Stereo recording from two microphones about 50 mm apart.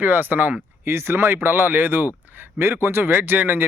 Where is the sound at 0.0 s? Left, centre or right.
Right.